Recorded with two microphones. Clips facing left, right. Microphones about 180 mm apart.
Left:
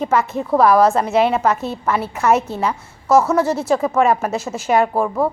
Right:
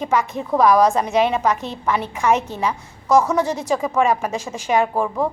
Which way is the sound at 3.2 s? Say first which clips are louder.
Left 3 dB; 15° right (ahead or behind).